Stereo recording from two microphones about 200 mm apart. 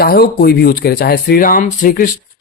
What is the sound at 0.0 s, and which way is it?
Speech, 50° left (ahead or behind).